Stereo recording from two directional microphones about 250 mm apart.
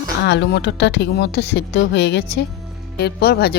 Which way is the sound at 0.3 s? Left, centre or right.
Left.